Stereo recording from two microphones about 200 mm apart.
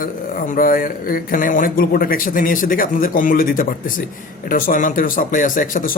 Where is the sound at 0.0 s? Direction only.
45° left (ahead or behind).